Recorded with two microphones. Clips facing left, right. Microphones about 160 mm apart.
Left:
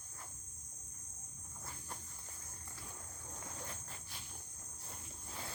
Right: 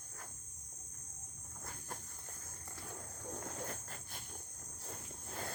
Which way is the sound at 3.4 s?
50° right (ahead or behind).